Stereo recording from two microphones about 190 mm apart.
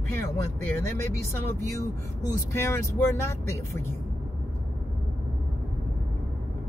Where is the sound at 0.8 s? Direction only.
15° left (ahead or behind).